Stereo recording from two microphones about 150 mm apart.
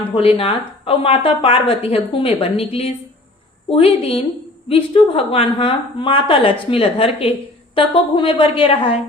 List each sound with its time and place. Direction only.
0.3 s a woman's voice: 40° left (ahead or behind)